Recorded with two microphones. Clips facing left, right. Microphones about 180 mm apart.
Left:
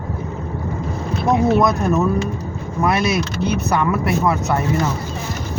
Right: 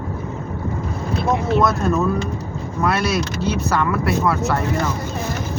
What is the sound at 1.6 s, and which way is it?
Speech, 20° left (ahead or behind).